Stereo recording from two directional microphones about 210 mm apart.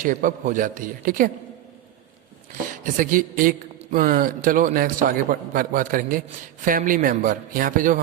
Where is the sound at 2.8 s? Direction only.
40° right (ahead or behind).